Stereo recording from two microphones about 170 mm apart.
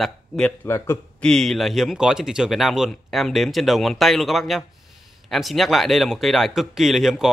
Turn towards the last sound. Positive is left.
turn(degrees=0)  # may be behind; listen again after turning